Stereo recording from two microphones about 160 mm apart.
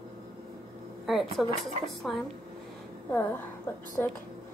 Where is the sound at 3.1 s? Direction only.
15° left (ahead or behind).